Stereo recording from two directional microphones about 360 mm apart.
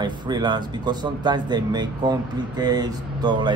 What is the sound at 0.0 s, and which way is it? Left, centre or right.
Speech, centre.